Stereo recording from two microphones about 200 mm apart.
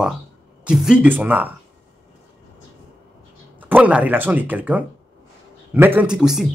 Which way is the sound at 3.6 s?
10° right (ahead or behind).